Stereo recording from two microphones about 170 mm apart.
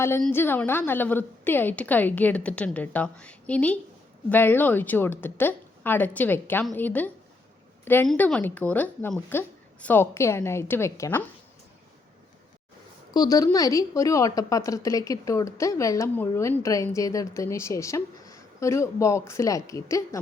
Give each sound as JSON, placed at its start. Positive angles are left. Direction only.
{"t": 0.2, "sound": "a woman's voice", "side_deg": 10}
{"t": 13.1, "sound": "a woman's voice", "side_deg": 20}